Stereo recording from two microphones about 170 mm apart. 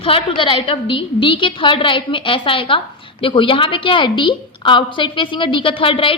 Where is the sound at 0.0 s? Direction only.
30° left (ahead or behind).